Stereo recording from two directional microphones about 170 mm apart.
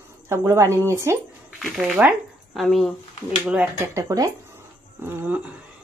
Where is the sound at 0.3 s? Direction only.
15° right (ahead or behind).